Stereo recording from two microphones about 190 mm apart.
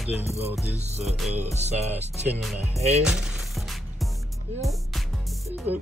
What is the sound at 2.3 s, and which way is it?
Speech, centre (ahead or behind).